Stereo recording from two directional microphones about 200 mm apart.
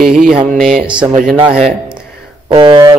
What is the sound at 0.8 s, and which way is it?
Speech, 5° right (ahead or behind).